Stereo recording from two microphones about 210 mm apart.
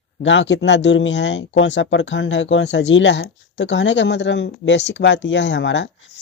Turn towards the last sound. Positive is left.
turn(degrees=60)  # may be behind; listen again after turning